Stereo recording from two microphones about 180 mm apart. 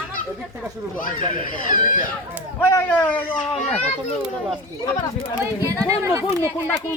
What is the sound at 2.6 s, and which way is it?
Speech, 15° left (ahead or behind).